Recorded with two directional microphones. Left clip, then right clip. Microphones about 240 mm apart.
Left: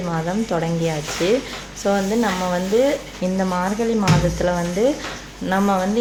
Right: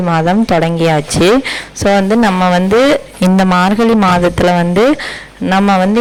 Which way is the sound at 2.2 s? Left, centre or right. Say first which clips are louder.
Right 10 dB; right.